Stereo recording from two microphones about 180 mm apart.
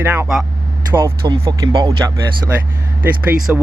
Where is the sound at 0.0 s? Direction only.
10° right (ahead or behind).